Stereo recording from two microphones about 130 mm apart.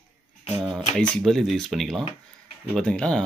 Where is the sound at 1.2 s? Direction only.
Centre (ahead or behind).